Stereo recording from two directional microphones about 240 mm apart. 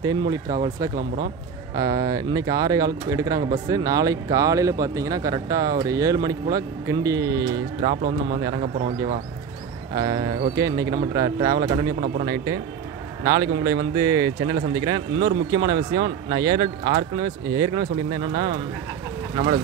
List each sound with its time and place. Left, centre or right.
0.0 s speech: centre
0.9 s speech: right
1.8 s speech: centre
13.2 s speech: centre